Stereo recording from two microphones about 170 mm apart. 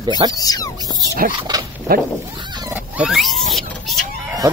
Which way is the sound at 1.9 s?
60° right (ahead or behind).